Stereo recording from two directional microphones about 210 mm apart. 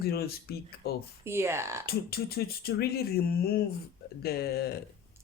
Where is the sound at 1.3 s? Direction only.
10° right (ahead or behind).